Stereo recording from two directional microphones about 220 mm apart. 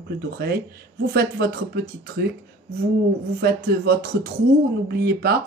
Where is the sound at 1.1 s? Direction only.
45° right (ahead or behind).